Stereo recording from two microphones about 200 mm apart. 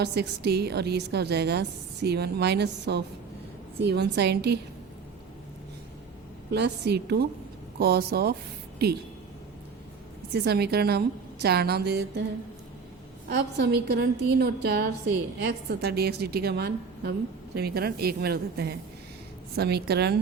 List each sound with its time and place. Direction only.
0.0 s a woman's voice: 55° right (ahead or behind)
6.5 s a woman's voice: 55° right (ahead or behind)
10.3 s a woman's voice: 55° right (ahead or behind)
13.2 s a woman's voice: 55° right (ahead or behind)